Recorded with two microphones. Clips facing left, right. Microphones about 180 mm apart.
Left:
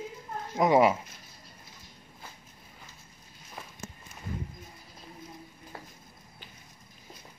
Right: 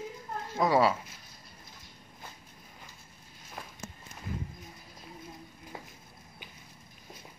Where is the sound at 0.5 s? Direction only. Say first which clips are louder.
Left 3 dB; 20° left (ahead or behind).